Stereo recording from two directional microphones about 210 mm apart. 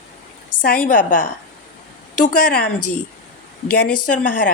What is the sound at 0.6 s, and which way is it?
Speech, 45° left (ahead or behind).